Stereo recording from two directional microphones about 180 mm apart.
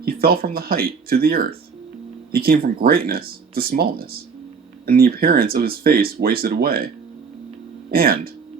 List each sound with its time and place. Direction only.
0.0 s speech: 55° right (ahead or behind)